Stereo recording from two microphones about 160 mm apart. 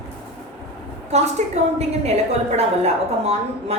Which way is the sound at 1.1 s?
45° right (ahead or behind).